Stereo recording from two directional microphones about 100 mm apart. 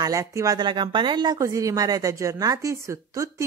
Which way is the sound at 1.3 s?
35° right (ahead or behind).